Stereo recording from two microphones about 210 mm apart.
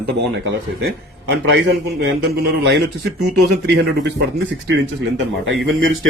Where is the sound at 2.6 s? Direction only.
50° right (ahead or behind).